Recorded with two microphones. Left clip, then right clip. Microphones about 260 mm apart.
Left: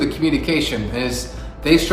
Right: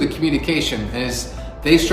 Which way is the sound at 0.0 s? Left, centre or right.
Centre.